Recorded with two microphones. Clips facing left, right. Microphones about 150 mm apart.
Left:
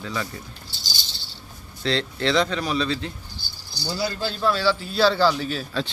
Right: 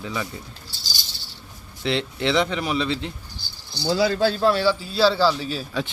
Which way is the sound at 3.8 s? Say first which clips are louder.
Right 7 dB; 90° right.